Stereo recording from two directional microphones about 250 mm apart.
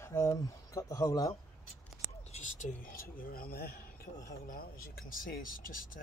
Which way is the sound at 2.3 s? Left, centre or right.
Left.